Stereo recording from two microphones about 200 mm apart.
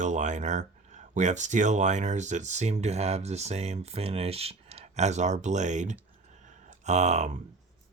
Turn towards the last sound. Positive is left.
turn(degrees=-35)  # may be behind; listen again after turning